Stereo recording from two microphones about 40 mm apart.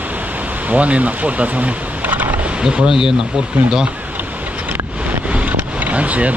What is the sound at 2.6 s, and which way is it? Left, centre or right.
Speech, right.